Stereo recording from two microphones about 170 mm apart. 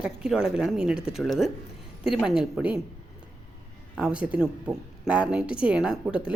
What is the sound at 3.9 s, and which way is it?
A woman's voice, 5° right (ahead or behind).